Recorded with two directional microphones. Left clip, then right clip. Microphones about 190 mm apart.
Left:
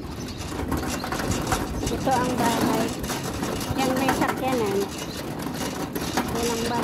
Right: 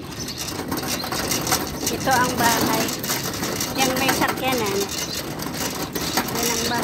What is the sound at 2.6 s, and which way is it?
Vehicle, 40° right (ahead or behind).